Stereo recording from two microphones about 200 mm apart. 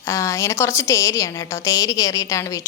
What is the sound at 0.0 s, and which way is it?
A woman's voice, 15° left (ahead or behind).